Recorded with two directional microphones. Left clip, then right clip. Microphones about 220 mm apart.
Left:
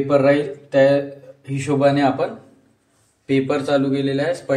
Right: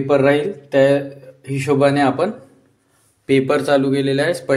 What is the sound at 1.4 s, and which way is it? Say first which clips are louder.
Speech: right 2 dB; 55° right (ahead or behind).